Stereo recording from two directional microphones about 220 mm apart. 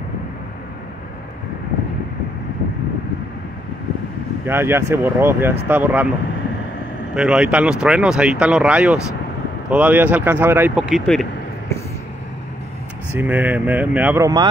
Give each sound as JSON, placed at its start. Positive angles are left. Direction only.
{"t": 4.5, "sound": "speech", "side_deg": -10}
{"t": 7.2, "sound": "speech", "side_deg": -5}
{"t": 13.1, "sound": "speech", "side_deg": -5}